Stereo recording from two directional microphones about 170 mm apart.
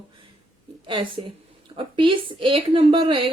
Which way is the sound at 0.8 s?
30° right (ahead or behind).